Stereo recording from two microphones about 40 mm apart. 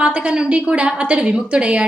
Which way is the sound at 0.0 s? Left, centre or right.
Right.